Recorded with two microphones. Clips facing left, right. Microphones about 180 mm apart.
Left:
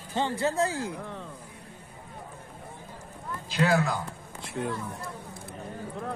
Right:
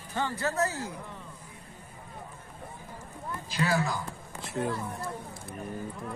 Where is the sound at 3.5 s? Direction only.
60° left (ahead or behind).